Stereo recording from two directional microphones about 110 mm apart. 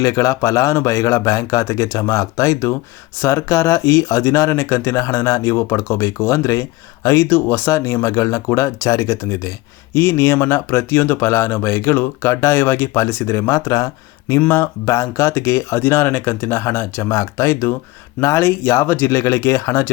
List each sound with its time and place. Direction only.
0.0 s speech: 30° left (ahead or behind)